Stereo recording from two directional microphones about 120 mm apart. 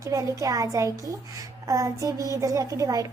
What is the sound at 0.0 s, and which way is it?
A woman's voice, 25° right (ahead or behind).